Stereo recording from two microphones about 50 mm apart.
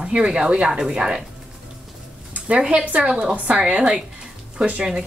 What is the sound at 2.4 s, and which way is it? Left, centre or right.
Speech, right.